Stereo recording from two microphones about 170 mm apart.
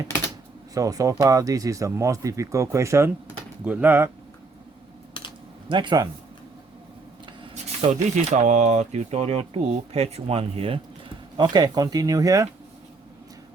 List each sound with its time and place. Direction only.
0.7 s speech: 20° right (ahead or behind)
5.6 s speech: 25° right (ahead or behind)
8.1 s speech: 45° right (ahead or behind)
11.3 s speech: 25° right (ahead or behind)